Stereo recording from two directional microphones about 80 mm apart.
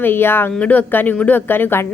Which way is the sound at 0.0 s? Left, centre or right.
Left.